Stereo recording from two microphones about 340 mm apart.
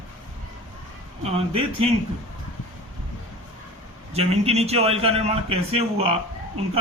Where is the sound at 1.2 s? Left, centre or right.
Centre.